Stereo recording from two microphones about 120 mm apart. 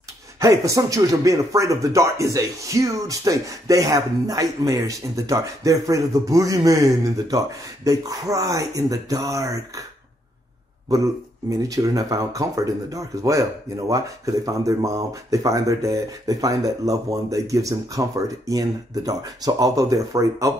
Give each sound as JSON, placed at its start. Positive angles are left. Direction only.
{"t": 0.4, "sound": "speech", "side_deg": -25}
{"t": 11.6, "sound": "speech", "side_deg": -30}